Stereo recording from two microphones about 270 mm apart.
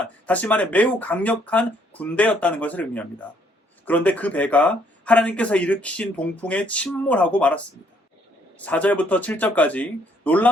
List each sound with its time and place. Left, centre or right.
0.0 s speech: centre